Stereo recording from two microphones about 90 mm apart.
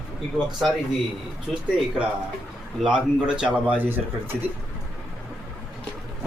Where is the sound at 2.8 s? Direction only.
10° right (ahead or behind).